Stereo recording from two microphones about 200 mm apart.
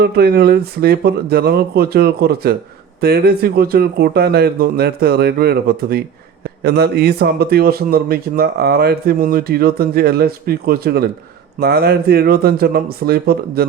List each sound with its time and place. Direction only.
0.0 s a man's voice: 50° right (ahead or behind)